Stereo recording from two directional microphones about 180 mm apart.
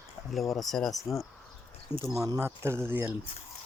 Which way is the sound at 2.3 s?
15° right (ahead or behind).